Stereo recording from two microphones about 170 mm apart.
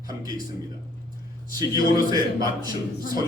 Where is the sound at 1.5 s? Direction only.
20° right (ahead or behind).